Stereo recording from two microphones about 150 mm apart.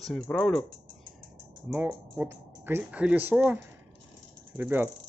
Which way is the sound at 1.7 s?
10° right (ahead or behind).